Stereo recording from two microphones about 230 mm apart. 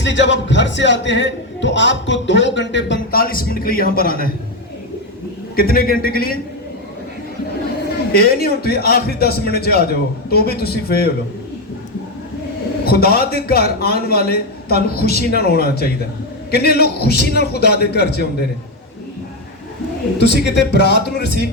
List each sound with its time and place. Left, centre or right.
0.0 s a man's voice: left
5.5 s a man's voice: left
8.1 s a man's voice: left
12.8 s a man's voice: left
20.1 s a man's voice: left